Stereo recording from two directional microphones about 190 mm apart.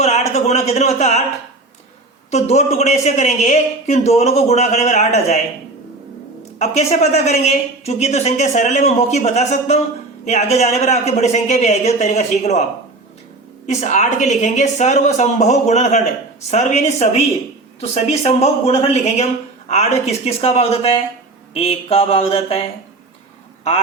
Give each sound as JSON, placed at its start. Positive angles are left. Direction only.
{"t": 0.0, "sound": "a woman's voice", "side_deg": 35}
{"t": 2.3, "sound": "a woman's voice", "side_deg": 35}
{"t": 6.6, "sound": "a woman's voice", "side_deg": 35}
{"t": 13.7, "sound": "a woman's voice", "side_deg": 40}